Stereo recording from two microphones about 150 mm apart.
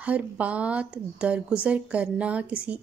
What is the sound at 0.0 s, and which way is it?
Speech, 10° right (ahead or behind).